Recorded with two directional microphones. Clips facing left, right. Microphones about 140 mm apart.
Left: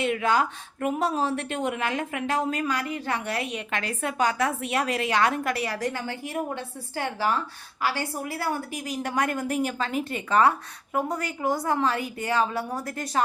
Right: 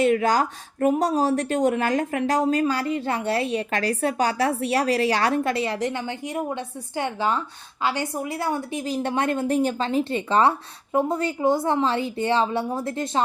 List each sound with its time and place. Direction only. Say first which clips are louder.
0.0 s a woman's voice: right 4 dB; 40° right (ahead or behind)